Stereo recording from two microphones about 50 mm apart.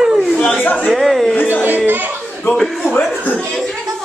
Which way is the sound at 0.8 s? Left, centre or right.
Centre.